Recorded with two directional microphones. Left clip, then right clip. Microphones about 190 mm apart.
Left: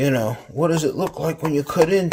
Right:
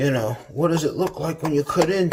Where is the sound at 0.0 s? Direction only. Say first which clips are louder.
Left 2 dB; 45° left (ahead or behind).